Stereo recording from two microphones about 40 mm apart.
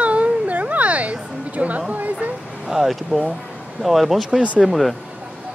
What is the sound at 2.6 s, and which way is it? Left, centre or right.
Speech, centre.